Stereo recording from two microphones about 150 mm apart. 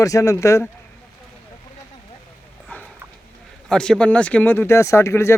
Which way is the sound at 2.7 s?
10° left (ahead or behind).